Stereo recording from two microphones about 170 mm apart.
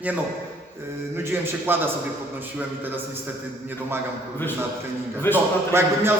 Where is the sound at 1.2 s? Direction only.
15° right (ahead or behind).